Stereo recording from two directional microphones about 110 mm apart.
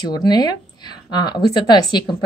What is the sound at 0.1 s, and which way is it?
A woman's voice, 40° left (ahead or behind).